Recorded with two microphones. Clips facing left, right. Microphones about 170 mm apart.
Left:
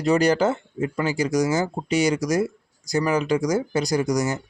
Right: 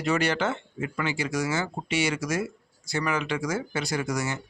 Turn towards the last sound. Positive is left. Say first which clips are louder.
# left 7 dB
turn(degrees=40)  # may be behind; listen again after turning